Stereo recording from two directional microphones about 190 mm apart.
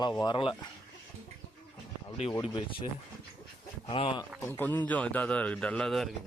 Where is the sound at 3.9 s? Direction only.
30° left (ahead or behind).